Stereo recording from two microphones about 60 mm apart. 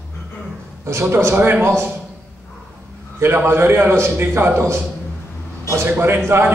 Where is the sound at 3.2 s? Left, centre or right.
Right.